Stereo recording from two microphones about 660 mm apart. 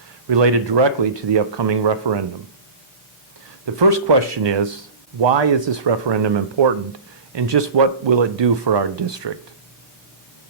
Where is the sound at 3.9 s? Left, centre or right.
Right.